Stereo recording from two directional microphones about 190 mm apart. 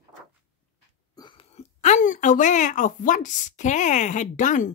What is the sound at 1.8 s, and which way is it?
Speech, 40° left (ahead or behind).